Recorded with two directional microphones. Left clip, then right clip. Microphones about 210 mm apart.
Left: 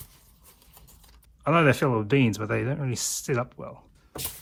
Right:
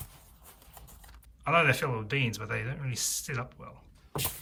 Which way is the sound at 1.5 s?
15° left (ahead or behind).